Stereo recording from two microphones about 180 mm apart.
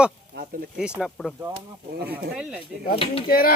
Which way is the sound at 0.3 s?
60° right (ahead or behind).